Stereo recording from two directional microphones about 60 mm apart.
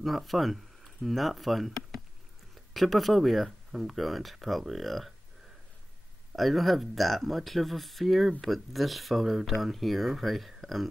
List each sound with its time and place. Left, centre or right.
0.0 s speech: centre
2.7 s speech: centre
6.3 s speech: centre